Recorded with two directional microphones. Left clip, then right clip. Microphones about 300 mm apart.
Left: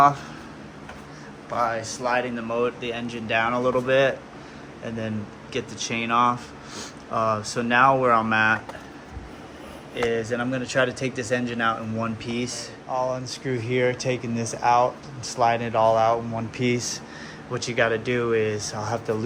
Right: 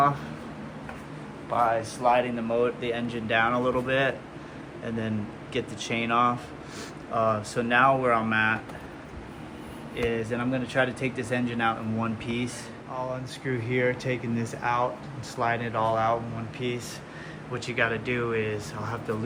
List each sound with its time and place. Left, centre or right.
1.5 s speech: centre
5.5 s speech: centre
10.0 s speech: centre
16.6 s speech: centre